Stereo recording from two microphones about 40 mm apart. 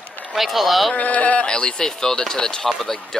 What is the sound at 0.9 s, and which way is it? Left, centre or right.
Speech, left.